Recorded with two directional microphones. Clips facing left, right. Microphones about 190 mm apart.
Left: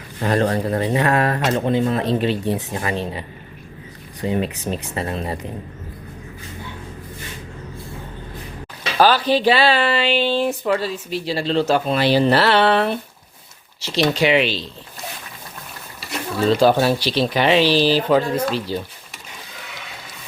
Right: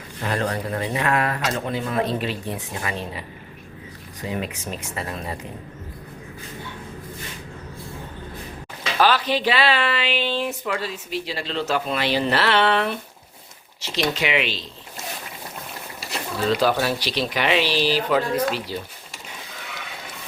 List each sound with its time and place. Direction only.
0.2 s speech: 35° left (ahead or behind)
9.0 s speech: 35° left (ahead or behind)
16.6 s speech: 30° left (ahead or behind)